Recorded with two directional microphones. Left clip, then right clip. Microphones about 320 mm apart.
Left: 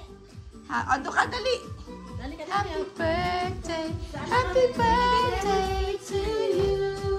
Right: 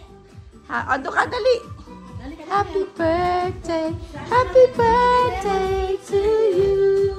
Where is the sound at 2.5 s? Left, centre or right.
Centre.